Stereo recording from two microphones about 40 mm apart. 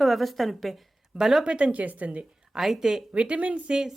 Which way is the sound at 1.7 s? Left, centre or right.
Right.